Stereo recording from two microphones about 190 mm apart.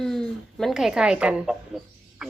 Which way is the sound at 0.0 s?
Centre (ahead or behind).